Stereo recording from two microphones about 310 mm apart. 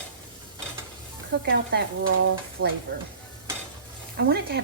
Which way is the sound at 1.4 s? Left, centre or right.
Right.